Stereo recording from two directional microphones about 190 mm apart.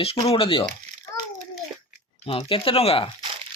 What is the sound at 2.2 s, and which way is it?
Speech, 30° left (ahead or behind).